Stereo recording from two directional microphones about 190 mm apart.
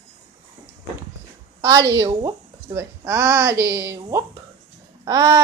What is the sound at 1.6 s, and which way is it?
Speech, 20° right (ahead or behind).